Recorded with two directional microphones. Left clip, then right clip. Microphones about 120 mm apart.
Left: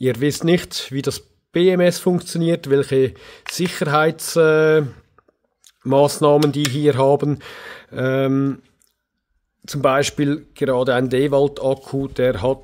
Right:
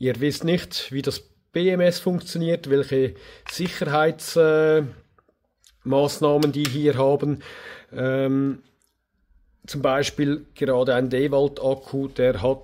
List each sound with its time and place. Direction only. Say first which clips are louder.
0.0 s speech: left 4 dB; 50° left (ahead or behind)
9.7 s speech: left 5 dB; 50° left (ahead or behind)